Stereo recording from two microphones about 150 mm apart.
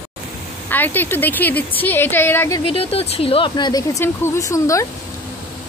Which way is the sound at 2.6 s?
40° left (ahead or behind).